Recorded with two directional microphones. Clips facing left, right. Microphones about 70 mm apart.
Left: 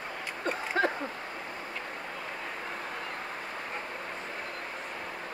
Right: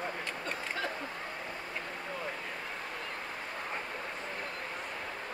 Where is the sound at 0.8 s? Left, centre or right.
Left.